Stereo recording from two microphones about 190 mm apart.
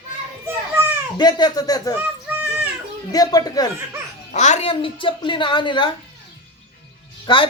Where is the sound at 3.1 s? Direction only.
20° left (ahead or behind).